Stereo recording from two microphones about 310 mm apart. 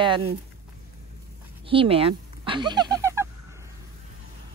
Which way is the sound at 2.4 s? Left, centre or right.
Centre.